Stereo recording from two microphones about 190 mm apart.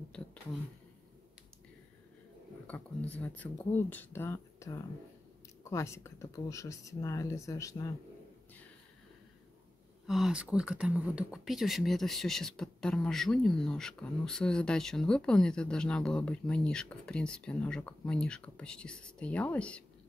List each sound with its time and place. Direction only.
0.1 s a sound: 5° left (ahead or behind)
2.6 s speech: 5° left (ahead or behind)
10.0 s speech: centre (ahead or behind)